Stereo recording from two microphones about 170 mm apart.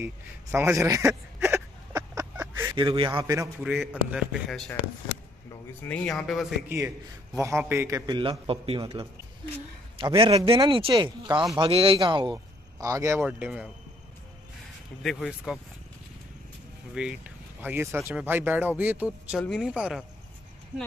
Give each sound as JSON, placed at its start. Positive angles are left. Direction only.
{"t": 0.0, "sound": "speech", "side_deg": -10}
{"t": 2.0, "sound": "a sound", "side_deg": -15}
{"t": 2.7, "sound": "speech", "side_deg": -30}
{"t": 3.6, "sound": "a man's voice", "side_deg": -5}
{"t": 5.9, "sound": "a man's voice", "side_deg": 5}
{"t": 7.3, "sound": "speech", "side_deg": -15}
{"t": 8.1, "sound": "a man's voice", "side_deg": -30}
{"t": 11.6, "sound": "a man's voice", "side_deg": -35}
{"t": 15.0, "sound": "a man's voice", "side_deg": 0}
{"t": 16.9, "sound": "speech", "side_deg": -5}
{"t": 19.4, "sound": "a man's voice", "side_deg": 0}